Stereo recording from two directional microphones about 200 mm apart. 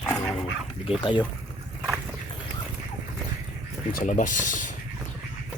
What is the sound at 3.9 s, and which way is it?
Speech, 40° left (ahead or behind).